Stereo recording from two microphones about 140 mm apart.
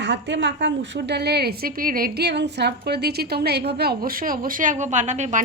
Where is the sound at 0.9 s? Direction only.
90° right.